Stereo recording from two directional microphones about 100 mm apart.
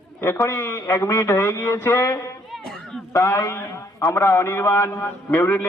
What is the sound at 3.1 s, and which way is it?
A man's voice, 30° left (ahead or behind).